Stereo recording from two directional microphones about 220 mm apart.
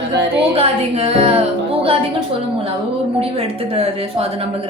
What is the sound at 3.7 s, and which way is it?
Speech, 25° right (ahead or behind).